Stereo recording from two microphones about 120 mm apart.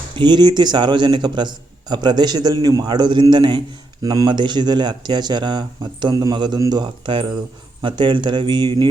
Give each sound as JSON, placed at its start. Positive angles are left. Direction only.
{"t": 0.2, "sound": "a man's voice", "side_deg": -40}